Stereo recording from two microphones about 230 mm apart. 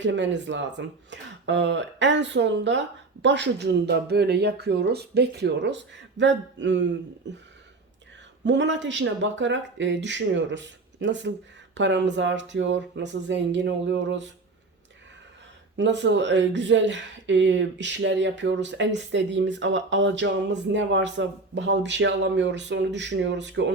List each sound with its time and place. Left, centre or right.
0.0 s speech: right
8.4 s speech: right
15.8 s speech: right